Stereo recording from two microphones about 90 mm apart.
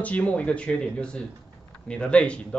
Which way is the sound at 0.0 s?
15° left (ahead or behind).